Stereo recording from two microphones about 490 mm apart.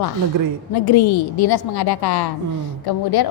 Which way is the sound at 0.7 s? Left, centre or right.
Left.